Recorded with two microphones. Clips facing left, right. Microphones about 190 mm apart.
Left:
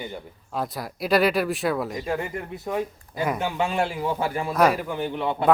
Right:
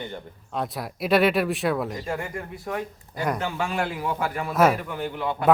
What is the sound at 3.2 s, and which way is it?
A man's voice, 5° left (ahead or behind).